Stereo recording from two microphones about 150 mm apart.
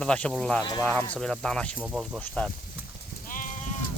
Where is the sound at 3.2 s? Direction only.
65° left (ahead or behind).